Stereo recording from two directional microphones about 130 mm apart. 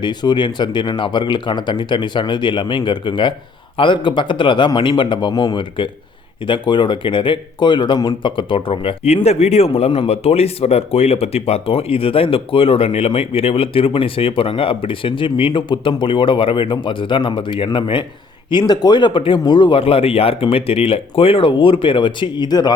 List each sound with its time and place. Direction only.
0.0 s speech: 35° left (ahead or behind)